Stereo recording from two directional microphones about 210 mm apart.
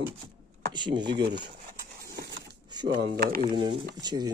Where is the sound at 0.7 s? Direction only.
20° right (ahead or behind).